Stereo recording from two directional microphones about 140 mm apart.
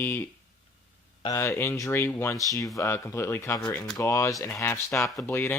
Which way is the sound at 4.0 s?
20° left (ahead or behind).